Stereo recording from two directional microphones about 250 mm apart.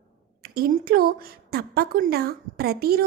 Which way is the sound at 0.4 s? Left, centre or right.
Right.